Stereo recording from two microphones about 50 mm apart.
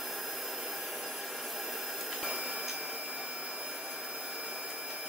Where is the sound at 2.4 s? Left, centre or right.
Right.